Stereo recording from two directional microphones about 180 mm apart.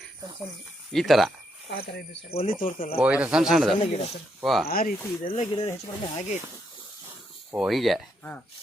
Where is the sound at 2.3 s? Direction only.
35° left (ahead or behind).